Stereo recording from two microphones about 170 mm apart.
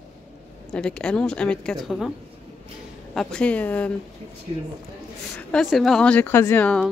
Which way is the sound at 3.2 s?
5° left (ahead or behind).